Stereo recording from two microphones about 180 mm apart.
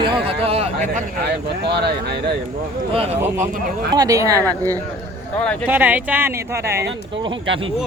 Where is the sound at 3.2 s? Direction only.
15° right (ahead or behind).